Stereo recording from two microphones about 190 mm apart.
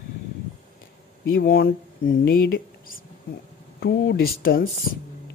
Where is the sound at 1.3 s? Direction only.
55° left (ahead or behind).